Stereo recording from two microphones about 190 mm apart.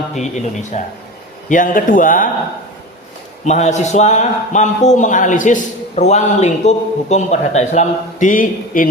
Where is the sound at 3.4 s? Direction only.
35° left (ahead or behind).